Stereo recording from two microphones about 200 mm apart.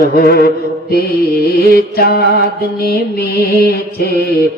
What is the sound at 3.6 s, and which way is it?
Mantra, 50° left (ahead or behind).